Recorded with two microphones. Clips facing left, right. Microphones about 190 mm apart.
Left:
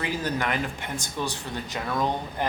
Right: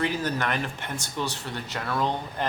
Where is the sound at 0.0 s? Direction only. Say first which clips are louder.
Right 1 dB; 10° left (ahead or behind).